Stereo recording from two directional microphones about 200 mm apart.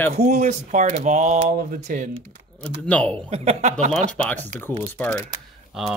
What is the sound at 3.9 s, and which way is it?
Speech, 10° left (ahead or behind).